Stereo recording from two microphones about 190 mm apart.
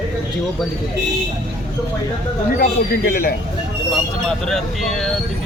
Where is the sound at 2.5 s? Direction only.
50° left (ahead or behind).